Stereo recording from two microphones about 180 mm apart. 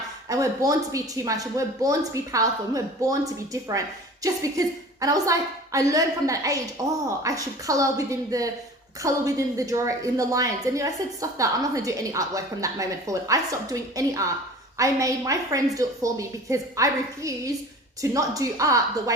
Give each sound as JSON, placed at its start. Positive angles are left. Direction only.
{"t": 0.3, "sound": "a woman's voice", "side_deg": -20}